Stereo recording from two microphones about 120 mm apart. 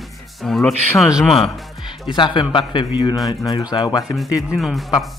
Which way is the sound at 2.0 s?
40° left (ahead or behind).